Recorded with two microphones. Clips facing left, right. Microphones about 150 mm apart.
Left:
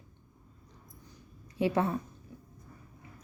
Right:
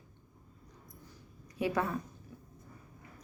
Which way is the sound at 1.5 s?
30° left (ahead or behind).